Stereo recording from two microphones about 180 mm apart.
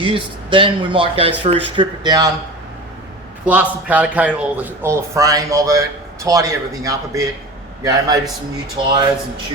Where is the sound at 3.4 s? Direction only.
10° right (ahead or behind).